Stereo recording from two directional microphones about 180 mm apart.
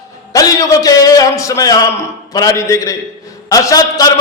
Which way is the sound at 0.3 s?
20° left (ahead or behind).